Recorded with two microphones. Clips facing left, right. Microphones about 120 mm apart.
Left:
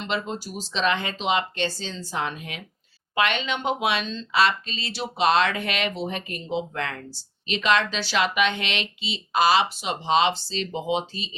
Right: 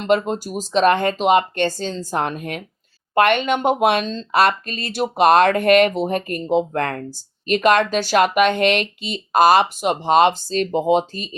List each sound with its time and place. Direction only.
0.0 s speech: 50° right (ahead or behind)